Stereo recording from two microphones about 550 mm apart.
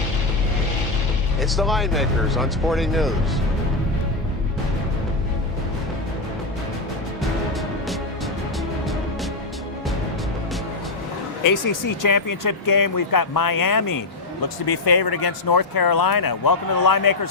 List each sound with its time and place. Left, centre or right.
1.4 s speech: centre
11.4 s speech: left